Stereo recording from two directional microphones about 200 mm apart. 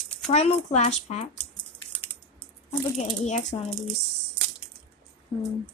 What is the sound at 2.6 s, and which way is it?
Speech, 35° left (ahead or behind).